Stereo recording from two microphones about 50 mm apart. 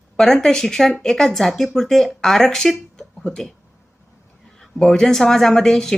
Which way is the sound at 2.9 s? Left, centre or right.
Left.